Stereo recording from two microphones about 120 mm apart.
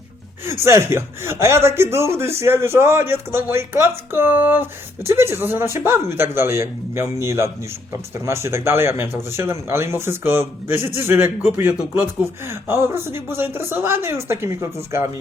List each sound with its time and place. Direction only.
0.6 s speech: 20° right (ahead or behind)